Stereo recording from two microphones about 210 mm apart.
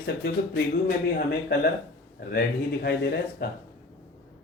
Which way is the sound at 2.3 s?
50° left (ahead or behind).